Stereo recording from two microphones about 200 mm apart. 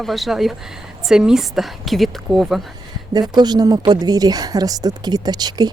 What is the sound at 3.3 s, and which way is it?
Speech, 20° right (ahead or behind).